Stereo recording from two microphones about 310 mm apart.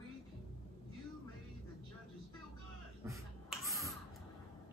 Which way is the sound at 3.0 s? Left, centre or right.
Centre.